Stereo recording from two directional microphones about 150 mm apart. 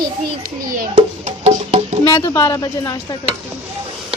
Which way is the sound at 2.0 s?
20° left (ahead or behind).